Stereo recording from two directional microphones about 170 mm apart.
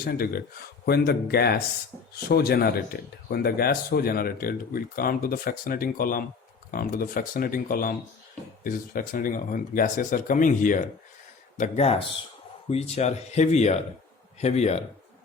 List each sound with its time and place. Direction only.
0.0 s speech: 60° left (ahead or behind); by 14.8 s 40° left (ahead or behind)